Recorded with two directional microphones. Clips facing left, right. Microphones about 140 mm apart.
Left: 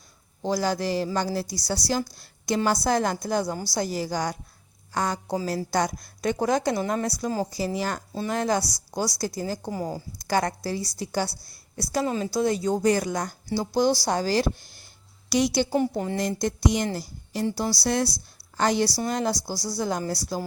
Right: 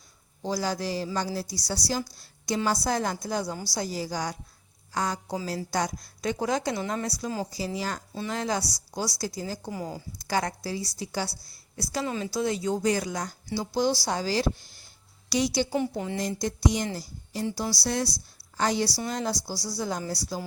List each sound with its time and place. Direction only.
0.4 s a woman's voice: 65° left (ahead or behind)
8.1 s a woman's voice: 45° left (ahead or behind)